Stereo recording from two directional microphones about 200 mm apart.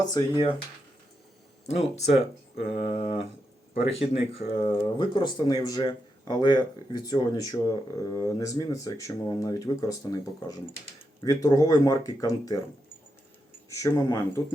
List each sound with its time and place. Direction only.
0.0 s speech: 20° left (ahead or behind)
1.6 s speech: 35° left (ahead or behind); by 12.5 s 15° left (ahead or behind)
13.7 s speech: 15° left (ahead or behind)